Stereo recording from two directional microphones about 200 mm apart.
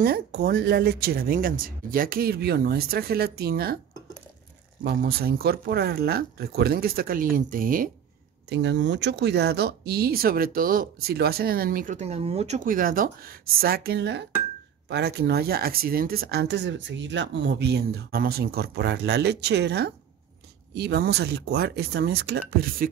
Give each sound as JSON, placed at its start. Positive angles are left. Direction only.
{"t": 0.0, "sound": "speech", "side_deg": -50}
{"t": 4.8, "sound": "speech", "side_deg": -50}
{"t": 8.5, "sound": "speech", "side_deg": -60}